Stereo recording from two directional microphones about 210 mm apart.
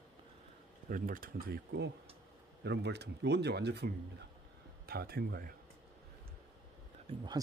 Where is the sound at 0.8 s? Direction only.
40° right (ahead or behind).